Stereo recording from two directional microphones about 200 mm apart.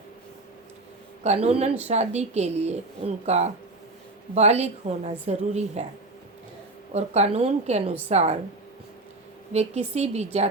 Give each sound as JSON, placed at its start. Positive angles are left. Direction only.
{"t": 1.2, "sound": "a woman's voice", "side_deg": -30}
{"t": 6.9, "sound": "a woman's voice", "side_deg": -35}
{"t": 9.5, "sound": "a woman's voice", "side_deg": -35}